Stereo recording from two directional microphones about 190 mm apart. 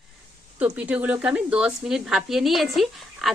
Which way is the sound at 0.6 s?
5° right (ahead or behind).